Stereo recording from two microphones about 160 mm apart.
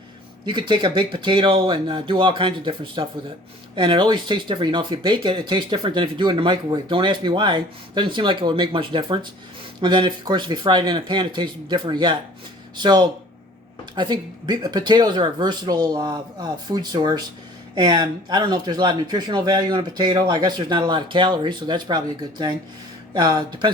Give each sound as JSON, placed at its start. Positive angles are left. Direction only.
{"t": 0.7, "sound": "speech", "side_deg": -30}